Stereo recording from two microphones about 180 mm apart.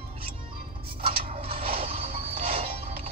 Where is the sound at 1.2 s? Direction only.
30° right (ahead or behind).